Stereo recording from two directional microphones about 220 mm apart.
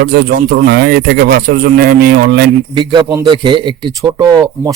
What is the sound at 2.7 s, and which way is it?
A man's voice, 15° right (ahead or behind).